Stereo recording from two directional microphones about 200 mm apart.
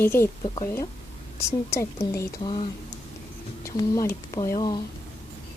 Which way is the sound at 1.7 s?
15° left (ahead or behind).